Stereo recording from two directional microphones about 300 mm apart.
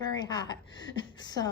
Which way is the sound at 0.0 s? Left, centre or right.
Centre.